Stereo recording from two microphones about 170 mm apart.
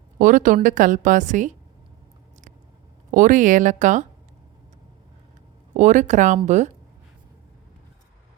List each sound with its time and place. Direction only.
0.2 s a woman's voice: 50° right (ahead or behind)
3.1 s a woman's voice: 50° right (ahead or behind)
5.7 s a woman's voice: 45° right (ahead or behind)